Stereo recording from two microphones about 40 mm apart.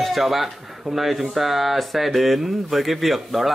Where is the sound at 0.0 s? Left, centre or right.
Centre.